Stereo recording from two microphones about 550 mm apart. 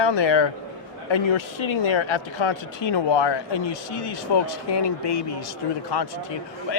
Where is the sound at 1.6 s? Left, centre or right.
Left.